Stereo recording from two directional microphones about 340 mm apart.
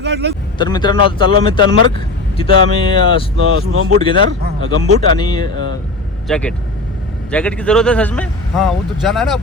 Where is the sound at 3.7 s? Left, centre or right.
Right.